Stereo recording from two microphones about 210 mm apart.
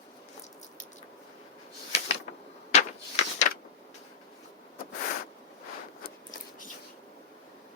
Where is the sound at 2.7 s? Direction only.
30° left (ahead or behind).